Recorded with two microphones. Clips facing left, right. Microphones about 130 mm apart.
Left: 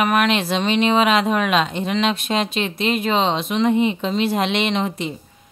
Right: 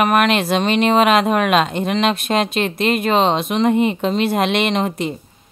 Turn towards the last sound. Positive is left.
turn(degrees=-50)  # may be behind; listen again after turning